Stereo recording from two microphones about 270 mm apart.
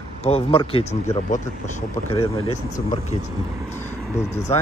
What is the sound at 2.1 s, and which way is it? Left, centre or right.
Speech, left.